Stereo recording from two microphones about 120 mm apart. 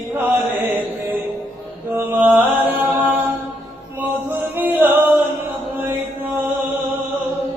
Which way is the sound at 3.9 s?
15° right (ahead or behind).